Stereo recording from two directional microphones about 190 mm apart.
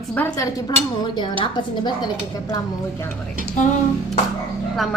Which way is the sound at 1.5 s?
20° left (ahead or behind).